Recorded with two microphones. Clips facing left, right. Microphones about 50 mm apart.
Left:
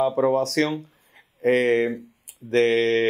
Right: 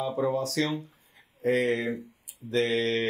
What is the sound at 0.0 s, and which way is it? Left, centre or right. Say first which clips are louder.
Speech: left 7 dB; left.